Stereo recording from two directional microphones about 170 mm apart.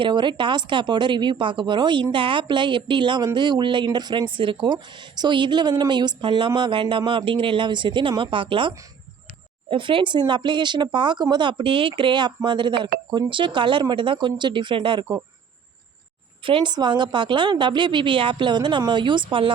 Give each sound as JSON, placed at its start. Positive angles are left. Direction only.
{"t": 0.0, "sound": "speech", "side_deg": -25}
{"t": 16.4, "sound": "speech", "side_deg": -30}